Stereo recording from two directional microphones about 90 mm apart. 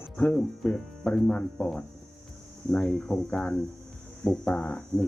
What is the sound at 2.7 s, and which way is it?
Speech, 10° left (ahead or behind).